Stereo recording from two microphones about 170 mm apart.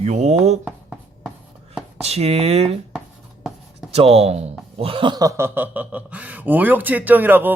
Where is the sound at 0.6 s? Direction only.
5° right (ahead or behind).